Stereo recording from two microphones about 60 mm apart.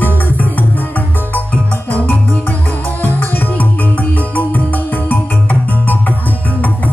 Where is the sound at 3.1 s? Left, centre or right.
Left.